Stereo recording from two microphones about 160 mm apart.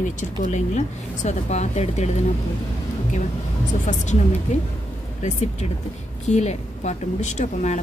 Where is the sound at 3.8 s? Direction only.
50° left (ahead or behind).